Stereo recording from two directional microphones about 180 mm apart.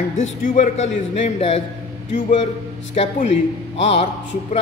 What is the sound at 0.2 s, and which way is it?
A man's voice, 40° left (ahead or behind).